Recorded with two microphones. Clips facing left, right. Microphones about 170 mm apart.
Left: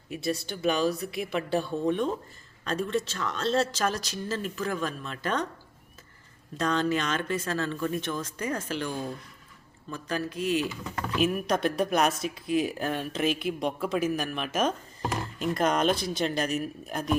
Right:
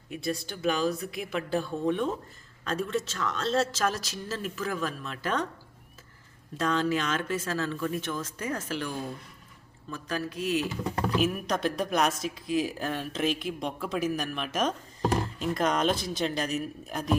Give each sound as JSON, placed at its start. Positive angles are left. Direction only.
{"t": 0.1, "sound": "speech", "side_deg": 0}
{"t": 6.6, "sound": "speech", "side_deg": -5}
{"t": 10.8, "sound": "speech", "side_deg": -35}
{"t": 11.2, "sound": "speech", "side_deg": 0}